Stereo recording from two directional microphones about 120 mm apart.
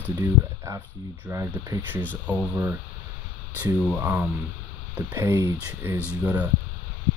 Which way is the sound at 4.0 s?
20° right (ahead or behind).